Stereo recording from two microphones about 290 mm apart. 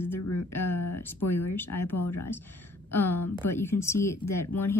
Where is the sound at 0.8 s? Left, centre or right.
Left.